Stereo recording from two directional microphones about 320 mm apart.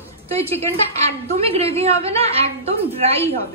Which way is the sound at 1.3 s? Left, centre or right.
Centre.